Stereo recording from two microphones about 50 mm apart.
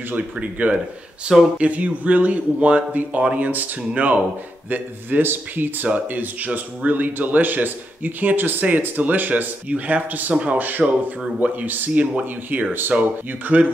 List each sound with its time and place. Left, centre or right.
0.1 s speech: right
10.3 s speech: right
10.6 s speech: right
12.9 s speech: centre
13.5 s speech: right